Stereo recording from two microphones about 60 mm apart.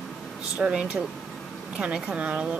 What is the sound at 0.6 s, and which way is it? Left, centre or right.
Speech, centre.